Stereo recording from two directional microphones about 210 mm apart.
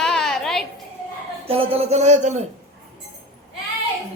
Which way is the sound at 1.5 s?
30° right (ahead or behind).